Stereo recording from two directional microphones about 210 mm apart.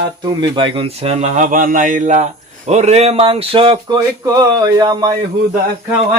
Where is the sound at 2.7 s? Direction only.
30° right (ahead or behind).